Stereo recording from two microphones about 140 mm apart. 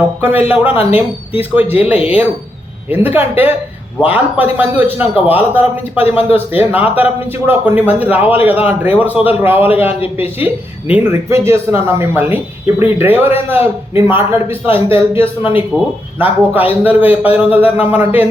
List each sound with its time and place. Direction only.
0.2 s speech: 15° right (ahead or behind)